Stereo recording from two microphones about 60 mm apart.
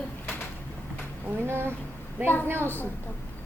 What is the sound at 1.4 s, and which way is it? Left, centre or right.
Speech, right.